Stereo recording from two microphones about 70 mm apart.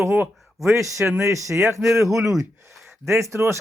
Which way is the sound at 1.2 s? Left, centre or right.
Right.